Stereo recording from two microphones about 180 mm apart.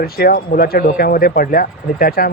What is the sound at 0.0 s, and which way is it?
Speech, 60° left (ahead or behind).